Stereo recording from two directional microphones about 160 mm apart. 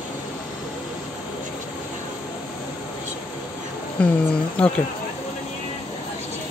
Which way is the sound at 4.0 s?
10° left (ahead or behind).